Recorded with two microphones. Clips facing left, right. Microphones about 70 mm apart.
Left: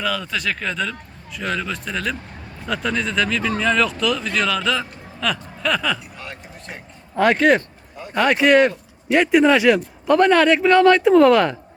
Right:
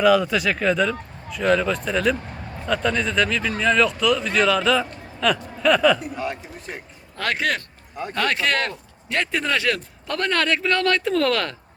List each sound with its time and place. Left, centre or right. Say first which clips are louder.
0.0 s speech: right 7 dB; centre
7.2 s a man's voice: left 9 dB; centre